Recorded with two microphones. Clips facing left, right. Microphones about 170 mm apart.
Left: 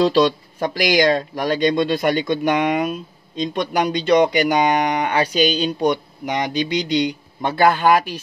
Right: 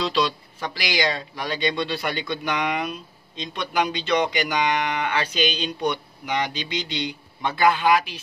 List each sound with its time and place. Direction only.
0.0 s speech: 40° left (ahead or behind)